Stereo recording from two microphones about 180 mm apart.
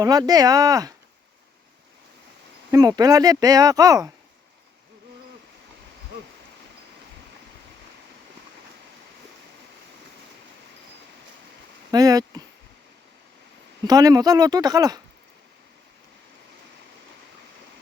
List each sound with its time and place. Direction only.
0.0 s speech: 20° right (ahead or behind)
2.7 s speech: 20° right (ahead or behind)
11.9 s speech: 20° right (ahead or behind)
13.8 s speech: 20° right (ahead or behind)